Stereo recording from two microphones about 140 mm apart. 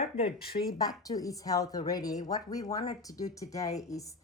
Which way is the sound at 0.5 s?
75° left (ahead or behind).